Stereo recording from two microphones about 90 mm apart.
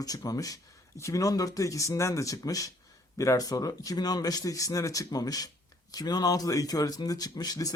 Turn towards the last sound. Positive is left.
turn(degrees=45)  # may be behind; listen again after turning